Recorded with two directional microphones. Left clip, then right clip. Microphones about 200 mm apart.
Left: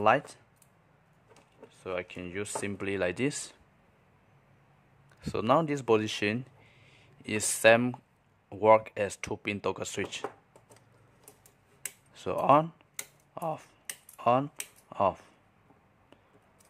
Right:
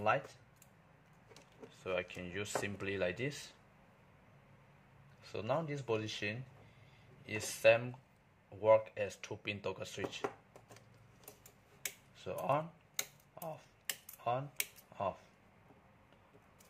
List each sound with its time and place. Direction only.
1.3 s speech: 20° left (ahead or behind)
5.2 s speech: 45° left (ahead or behind)
12.1 s speech: 50° left (ahead or behind)
13.3 s typing: 50° left (ahead or behind)
14.9 s a sound: 50° left (ahead or behind)